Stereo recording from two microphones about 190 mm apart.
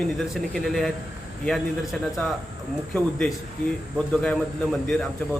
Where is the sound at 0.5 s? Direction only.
Centre (ahead or behind).